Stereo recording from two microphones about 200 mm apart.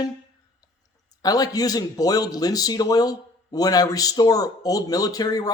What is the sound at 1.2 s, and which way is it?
A man's voice, 20° left (ahead or behind).